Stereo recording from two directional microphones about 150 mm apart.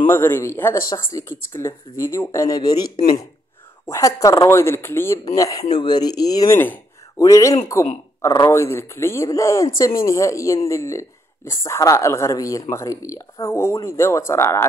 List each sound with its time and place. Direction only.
0.1 s speech: 15° left (ahead or behind)